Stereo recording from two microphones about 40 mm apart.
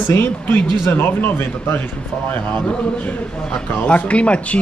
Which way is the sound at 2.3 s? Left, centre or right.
Left.